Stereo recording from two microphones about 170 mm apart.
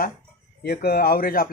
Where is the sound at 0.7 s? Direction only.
65° left (ahead or behind).